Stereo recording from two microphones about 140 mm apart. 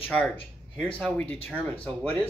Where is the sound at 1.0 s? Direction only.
5° left (ahead or behind).